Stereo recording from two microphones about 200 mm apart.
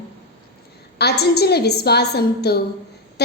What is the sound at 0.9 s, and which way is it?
A woman's voice, 55° left (ahead or behind).